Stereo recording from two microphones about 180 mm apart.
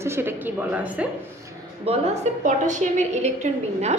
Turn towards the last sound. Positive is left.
turn(degrees=-40)  # may be behind; listen again after turning